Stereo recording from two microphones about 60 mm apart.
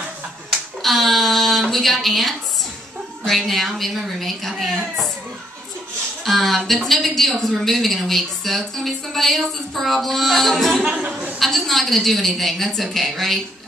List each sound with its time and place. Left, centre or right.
0.5 s a woman's voice: centre
6.2 s a woman's voice: centre
10.8 s a sound: centre
11.3 s a woman's voice: centre